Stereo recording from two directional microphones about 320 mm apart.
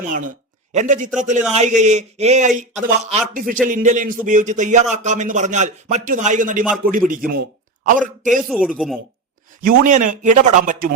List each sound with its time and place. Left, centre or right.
0.7 s a man's voice: right
8.4 s speech: centre
9.6 s a man's voice: right